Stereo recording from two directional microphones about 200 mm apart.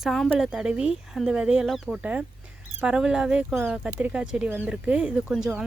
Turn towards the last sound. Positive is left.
turn(degrees=0)  # may be behind; listen again after turning